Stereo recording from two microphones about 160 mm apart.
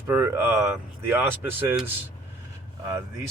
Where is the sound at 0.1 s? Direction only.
15° right (ahead or behind).